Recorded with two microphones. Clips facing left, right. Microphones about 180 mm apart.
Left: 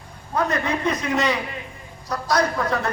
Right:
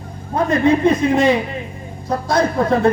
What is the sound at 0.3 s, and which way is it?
Speech, 25° right (ahead or behind).